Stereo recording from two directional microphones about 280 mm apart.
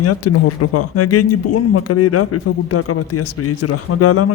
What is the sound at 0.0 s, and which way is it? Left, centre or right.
Speech, left.